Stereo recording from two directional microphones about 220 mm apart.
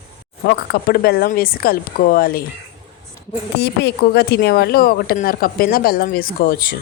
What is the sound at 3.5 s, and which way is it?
A woman's voice, 50° left (ahead or behind).